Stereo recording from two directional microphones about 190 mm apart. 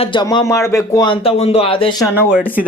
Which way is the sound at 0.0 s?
25° left (ahead or behind).